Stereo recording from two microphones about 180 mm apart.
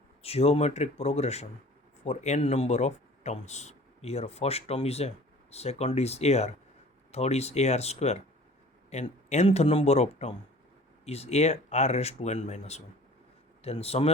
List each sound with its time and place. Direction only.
0.2 s speech: 35° left (ahead or behind)